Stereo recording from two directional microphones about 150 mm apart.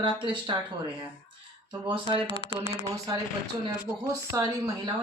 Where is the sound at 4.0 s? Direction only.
20° right (ahead or behind).